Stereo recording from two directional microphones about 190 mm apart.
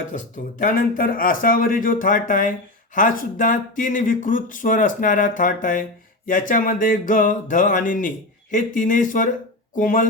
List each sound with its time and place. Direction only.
0.1 s speech: 45° left (ahead or behind)